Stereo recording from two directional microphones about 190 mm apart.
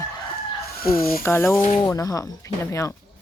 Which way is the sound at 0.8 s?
50° left (ahead or behind).